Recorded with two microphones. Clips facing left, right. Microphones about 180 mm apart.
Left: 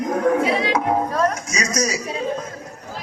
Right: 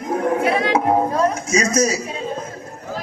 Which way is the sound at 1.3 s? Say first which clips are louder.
Right 6 dB; 30° right (ahead or behind).